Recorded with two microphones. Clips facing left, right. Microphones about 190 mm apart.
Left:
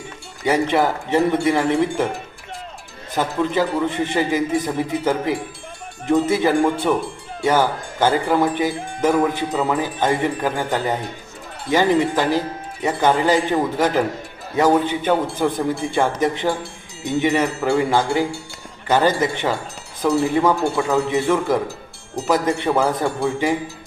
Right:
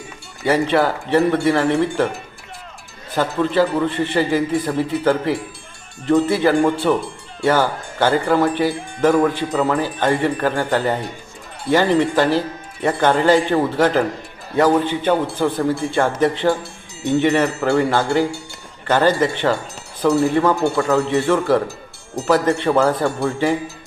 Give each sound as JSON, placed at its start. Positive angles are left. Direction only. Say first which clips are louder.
{"t": 0.4, "sound": "a man's voice", "louder": "right 1 dB", "side_deg": 15}
{"t": 3.2, "sound": "a man's voice", "louder": "right 3 dB", "side_deg": 15}